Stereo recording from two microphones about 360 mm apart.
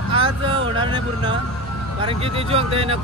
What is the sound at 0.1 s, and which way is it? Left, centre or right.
Vehicle, centre.